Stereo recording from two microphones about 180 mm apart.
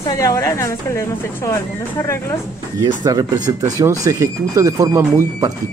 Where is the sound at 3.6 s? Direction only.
20° right (ahead or behind).